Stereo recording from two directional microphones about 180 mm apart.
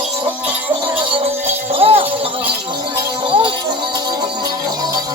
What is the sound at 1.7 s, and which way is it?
Music, 35° right (ahead or behind).